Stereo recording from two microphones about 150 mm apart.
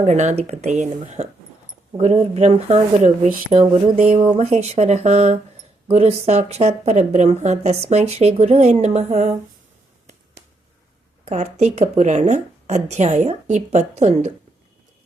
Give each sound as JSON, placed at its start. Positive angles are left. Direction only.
{"t": 0.0, "sound": "speech", "side_deg": -50}
{"t": 11.3, "sound": "speech", "side_deg": -50}